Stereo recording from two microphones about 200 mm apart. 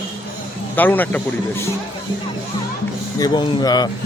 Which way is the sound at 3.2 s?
20° left (ahead or behind).